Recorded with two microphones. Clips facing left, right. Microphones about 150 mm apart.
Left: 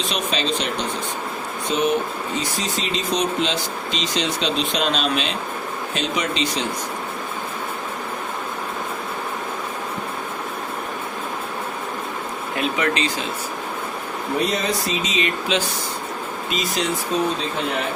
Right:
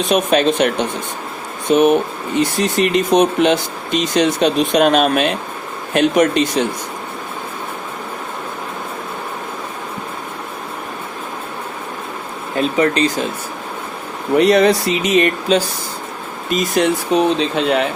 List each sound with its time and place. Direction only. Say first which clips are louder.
0.1 s speech: right 12 dB; 55° right (ahead or behind)
12.5 s speech: right 7 dB; 35° right (ahead or behind)
14.3 s speech: right 12 dB; 70° right (ahead or behind)
15.5 s speech: right 8 dB; 40° right (ahead or behind)
16.5 s speech: right 9 dB; 50° right (ahead or behind); by 17.8 s 85° right